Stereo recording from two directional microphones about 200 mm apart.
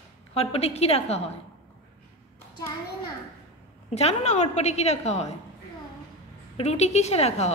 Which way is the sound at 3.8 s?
35° left (ahead or behind).